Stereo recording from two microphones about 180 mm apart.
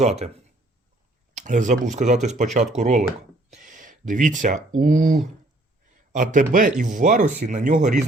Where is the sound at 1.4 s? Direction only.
45° right (ahead or behind).